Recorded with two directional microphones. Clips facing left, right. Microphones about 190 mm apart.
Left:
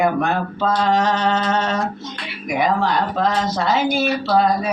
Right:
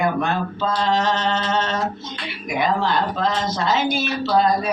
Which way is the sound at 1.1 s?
10° left (ahead or behind).